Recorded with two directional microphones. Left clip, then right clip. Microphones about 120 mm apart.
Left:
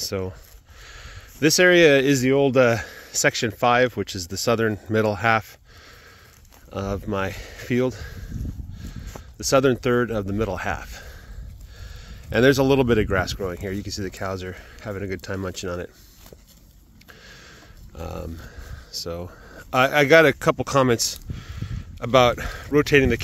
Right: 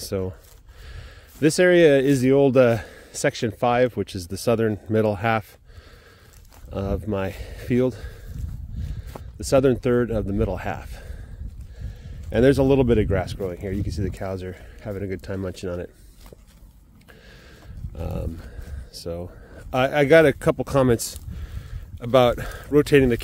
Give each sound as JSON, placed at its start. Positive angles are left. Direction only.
{"t": 0.0, "sound": "speech", "side_deg": -45}
{"t": 0.8, "sound": "a sound", "side_deg": -35}
{"t": 2.2, "sound": "speech", "side_deg": -50}
{"t": 2.6, "sound": "speech", "side_deg": -35}
{"t": 6.7, "sound": "speech", "side_deg": -35}
{"t": 8.9, "sound": "speech", "side_deg": -25}
{"t": 17.9, "sound": "speech", "side_deg": -35}